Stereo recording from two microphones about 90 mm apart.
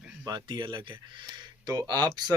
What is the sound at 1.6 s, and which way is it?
Speech, 50° right (ahead or behind).